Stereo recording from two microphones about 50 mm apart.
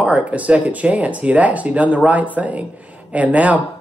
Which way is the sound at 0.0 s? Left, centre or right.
Right.